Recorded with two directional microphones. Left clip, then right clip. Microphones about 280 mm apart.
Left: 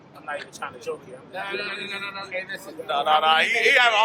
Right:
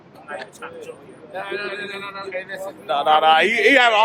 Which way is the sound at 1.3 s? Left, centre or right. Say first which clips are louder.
Right 2 dB; centre.